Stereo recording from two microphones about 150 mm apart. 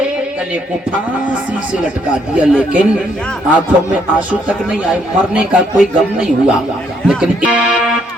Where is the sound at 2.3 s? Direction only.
5° right (ahead or behind).